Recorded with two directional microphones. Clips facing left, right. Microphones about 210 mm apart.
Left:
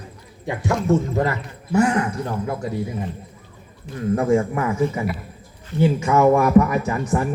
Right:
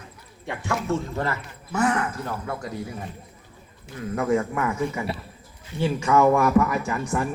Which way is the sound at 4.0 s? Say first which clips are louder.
Left 5 dB; 30° left (ahead or behind).